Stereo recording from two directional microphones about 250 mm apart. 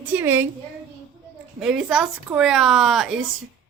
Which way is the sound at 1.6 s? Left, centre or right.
Centre.